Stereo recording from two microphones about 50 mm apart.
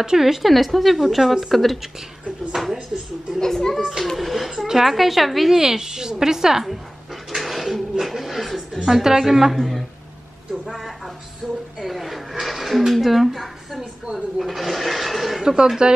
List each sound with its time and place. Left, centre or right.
0.0 s speech: centre
3.3 s a woman's voice: centre
7.2 s a sound: centre
8.8 s a woman's voice: centre
11.4 s a woman's voice: centre
11.8 s speech: centre
15.4 s a woman's voice: centre